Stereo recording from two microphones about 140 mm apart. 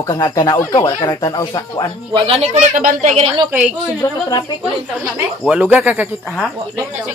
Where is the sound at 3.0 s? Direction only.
50° right (ahead or behind).